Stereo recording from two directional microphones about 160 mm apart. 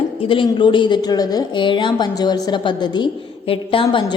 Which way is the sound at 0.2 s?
35° left (ahead or behind).